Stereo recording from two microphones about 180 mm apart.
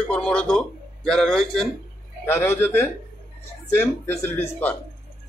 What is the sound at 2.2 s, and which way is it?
Speech, 15° left (ahead or behind).